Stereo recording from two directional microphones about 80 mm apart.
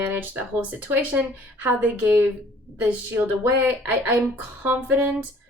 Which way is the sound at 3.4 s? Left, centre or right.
Right.